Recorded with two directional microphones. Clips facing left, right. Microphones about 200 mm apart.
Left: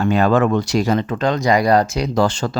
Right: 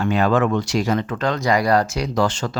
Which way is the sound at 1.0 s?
20° left (ahead or behind).